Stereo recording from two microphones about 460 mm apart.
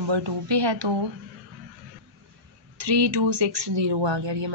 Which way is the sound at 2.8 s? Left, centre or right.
Right.